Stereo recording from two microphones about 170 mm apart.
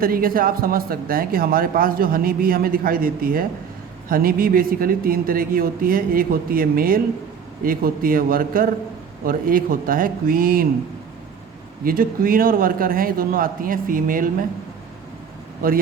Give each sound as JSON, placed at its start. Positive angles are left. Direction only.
{"t": 0.0, "sound": "speech", "side_deg": -60}
{"t": 11.9, "sound": "speech", "side_deg": -55}